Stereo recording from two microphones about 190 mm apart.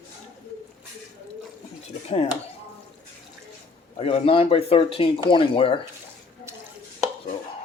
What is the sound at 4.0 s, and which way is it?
Speech, 30° left (ahead or behind).